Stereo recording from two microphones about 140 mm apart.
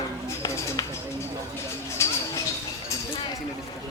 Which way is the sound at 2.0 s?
20° left (ahead or behind).